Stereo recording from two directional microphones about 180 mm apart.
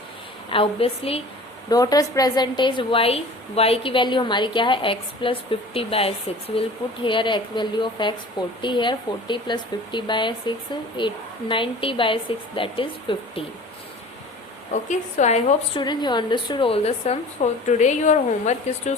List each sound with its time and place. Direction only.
0.5 s speech: 30° left (ahead or behind)
1.7 s a woman's voice: 20° left (ahead or behind)
14.7 s speech: 40° left (ahead or behind)
15.8 s speech: 25° left (ahead or behind); by 18.9 s 40° left (ahead or behind)